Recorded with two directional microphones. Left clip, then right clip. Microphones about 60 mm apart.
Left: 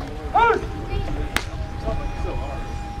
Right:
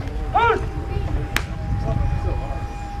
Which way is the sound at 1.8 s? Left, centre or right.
Left.